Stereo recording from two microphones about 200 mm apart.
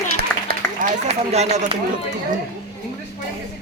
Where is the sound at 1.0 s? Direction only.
30° right (ahead or behind).